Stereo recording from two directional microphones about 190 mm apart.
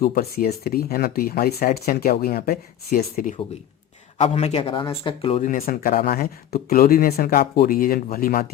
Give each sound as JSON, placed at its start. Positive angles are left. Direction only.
{"t": 0.0, "sound": "speech", "side_deg": 50}
{"t": 4.2, "sound": "a man's voice", "side_deg": 35}
{"t": 5.4, "sound": "speech", "side_deg": 45}